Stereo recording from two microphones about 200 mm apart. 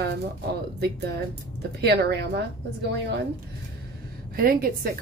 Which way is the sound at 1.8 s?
55° right (ahead or behind).